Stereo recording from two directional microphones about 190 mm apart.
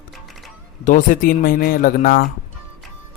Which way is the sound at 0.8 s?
45° left (ahead or behind).